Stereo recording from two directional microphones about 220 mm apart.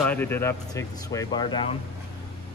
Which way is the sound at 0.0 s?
5° left (ahead or behind).